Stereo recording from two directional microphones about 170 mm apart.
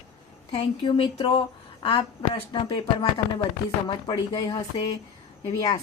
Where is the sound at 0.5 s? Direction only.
35° left (ahead or behind).